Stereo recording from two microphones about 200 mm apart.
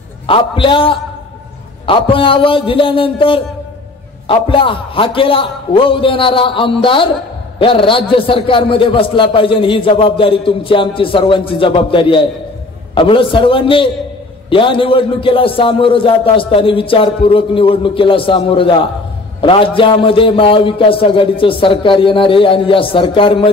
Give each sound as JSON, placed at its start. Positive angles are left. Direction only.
{"t": 0.3, "sound": "a man's voice", "side_deg": 25}